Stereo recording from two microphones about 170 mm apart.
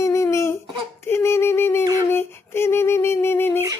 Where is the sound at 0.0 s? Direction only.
15° left (ahead or behind).